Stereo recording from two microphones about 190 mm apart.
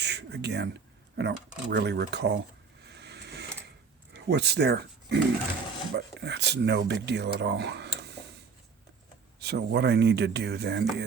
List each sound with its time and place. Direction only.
0.0 s a sound: 65° right (ahead or behind)
1.7 s speech: 65° right (ahead or behind)
2.8 s vehicle: 60° right (ahead or behind)
4.1 s speech: 60° right (ahead or behind)
9.4 s speech: 60° right (ahead or behind)